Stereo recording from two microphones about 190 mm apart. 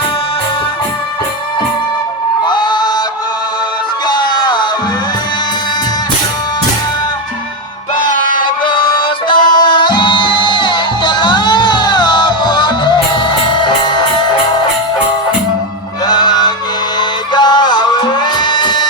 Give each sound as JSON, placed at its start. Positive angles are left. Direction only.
{"t": 2.5, "sound": "music", "side_deg": 25}
{"t": 4.0, "sound": "music", "side_deg": 25}
{"t": 8.4, "sound": "music", "side_deg": 25}
{"t": 16.0, "sound": "music", "side_deg": 20}